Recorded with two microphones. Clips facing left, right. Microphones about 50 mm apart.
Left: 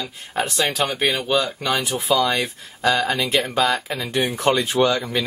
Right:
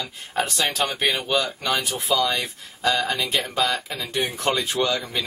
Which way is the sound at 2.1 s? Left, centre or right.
Centre.